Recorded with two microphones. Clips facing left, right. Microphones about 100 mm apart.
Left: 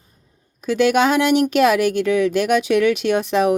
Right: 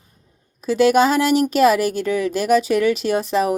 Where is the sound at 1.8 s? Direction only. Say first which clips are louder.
Left 3 dB; 40° right (ahead or behind).